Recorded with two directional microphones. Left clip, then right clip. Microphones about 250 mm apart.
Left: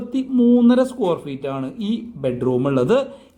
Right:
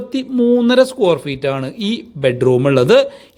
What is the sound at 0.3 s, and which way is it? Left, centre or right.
Speech, right.